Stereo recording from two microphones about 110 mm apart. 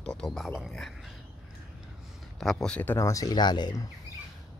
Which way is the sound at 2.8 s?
20° left (ahead or behind).